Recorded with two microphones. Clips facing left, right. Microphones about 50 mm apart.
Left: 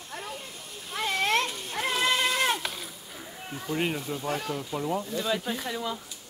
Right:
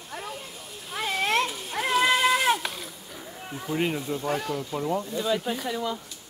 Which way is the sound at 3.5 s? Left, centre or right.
Centre.